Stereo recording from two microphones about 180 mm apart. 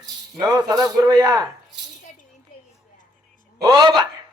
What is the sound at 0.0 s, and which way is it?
Speech, 20° right (ahead or behind).